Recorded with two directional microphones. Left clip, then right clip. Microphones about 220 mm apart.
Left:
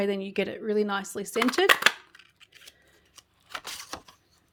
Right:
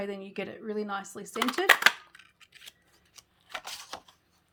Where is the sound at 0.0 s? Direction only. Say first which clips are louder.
Left 8 dB; 40° left (ahead or behind).